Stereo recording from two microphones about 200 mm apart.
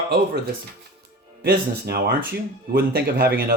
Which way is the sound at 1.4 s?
50° right (ahead or behind).